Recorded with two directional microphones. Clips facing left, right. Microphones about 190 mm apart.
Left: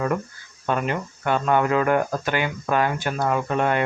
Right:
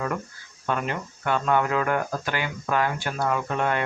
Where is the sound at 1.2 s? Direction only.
20° left (ahead or behind).